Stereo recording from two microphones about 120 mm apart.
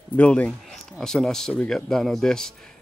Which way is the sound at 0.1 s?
10° left (ahead or behind).